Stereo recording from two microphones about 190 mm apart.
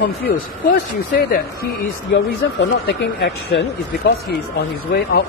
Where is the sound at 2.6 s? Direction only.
65° left (ahead or behind).